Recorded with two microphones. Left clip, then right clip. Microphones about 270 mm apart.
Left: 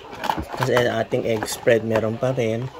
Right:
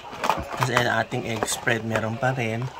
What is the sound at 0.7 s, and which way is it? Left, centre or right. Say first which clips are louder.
Speech: left 4 dB; centre.